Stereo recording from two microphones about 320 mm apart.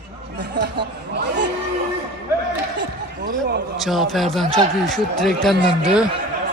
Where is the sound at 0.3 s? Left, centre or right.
Right.